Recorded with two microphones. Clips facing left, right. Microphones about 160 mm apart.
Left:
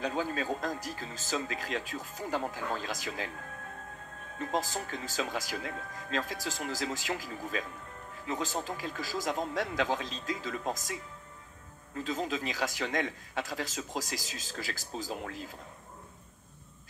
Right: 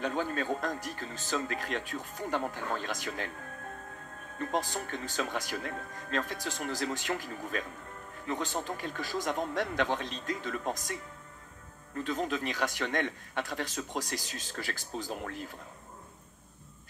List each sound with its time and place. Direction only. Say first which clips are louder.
0.0 s a man's voice: even; 55° right (ahead or behind)
4.4 s a man's voice: even; 55° right (ahead or behind)